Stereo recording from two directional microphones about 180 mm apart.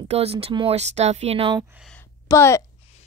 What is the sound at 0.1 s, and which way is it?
Speech, 35° right (ahead or behind).